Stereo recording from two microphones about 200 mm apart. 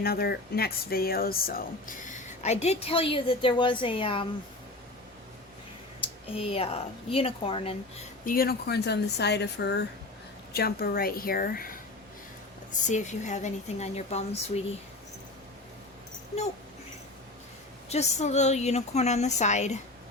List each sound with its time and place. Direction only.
0.0 s speech: 50° left (ahead or behind); by 4.3 s 25° left (ahead or behind)
6.3 s a woman's voice: 30° left (ahead or behind)
8.2 s a woman's voice: 45° left (ahead or behind)
12.9 s speech: 35° left (ahead or behind)
17.8 s speech: 35° left (ahead or behind)